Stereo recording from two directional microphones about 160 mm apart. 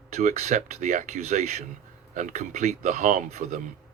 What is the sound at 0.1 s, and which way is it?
Speech, 45° right (ahead or behind).